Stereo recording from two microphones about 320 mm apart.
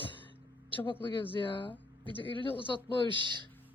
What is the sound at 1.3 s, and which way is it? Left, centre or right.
Speech, centre.